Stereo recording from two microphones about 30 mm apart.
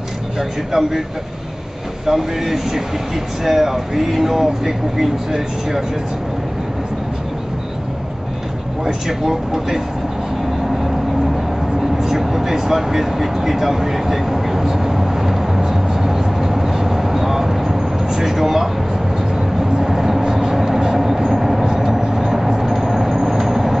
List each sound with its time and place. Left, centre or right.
0.4 s speech: centre
2.0 s speech: centre
8.8 s speech: centre
11.8 s vehicle: centre